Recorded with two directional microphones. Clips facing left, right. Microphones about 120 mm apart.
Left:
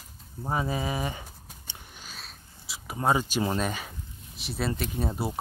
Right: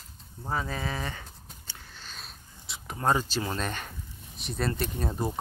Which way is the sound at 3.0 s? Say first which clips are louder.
Left 2 dB; 15° left (ahead or behind).